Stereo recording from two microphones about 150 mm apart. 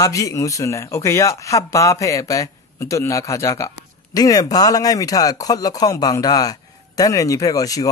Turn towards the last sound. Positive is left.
turn(degrees=25)  # may be behind; listen again after turning